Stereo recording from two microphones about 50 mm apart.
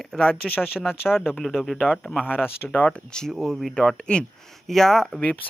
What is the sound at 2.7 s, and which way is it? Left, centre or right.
Speech, left.